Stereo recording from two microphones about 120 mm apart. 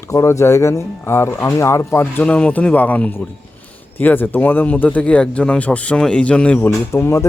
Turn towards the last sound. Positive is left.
turn(degrees=20)  # may be behind; listen again after turning